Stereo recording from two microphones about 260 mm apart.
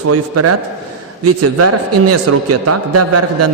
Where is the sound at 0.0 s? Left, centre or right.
Right.